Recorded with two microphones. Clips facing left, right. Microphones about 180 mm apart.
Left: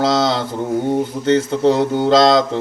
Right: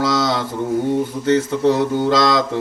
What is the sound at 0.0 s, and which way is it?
Mantra, 25° left (ahead or behind).